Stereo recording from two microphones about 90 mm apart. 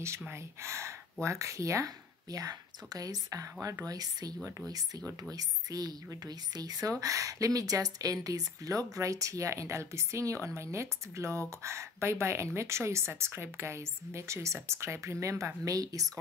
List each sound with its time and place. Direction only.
0.3 s speech: 30° right (ahead or behind)